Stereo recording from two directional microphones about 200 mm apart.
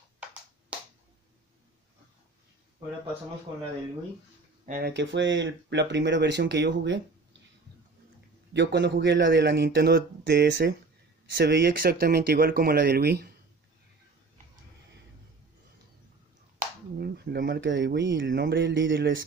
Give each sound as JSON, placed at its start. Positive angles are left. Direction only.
{"t": 0.2, "sound": "a sound", "side_deg": -5}
{"t": 4.6, "sound": "speech", "side_deg": -40}
{"t": 4.9, "sound": "speech", "side_deg": -65}
{"t": 8.5, "sound": "speech", "side_deg": -55}
{"t": 16.5, "sound": "speech", "side_deg": -55}